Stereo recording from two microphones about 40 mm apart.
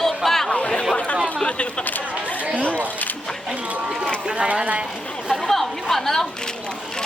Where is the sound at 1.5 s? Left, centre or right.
Left.